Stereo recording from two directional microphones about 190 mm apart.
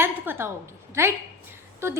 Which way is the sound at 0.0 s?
10° right (ahead or behind).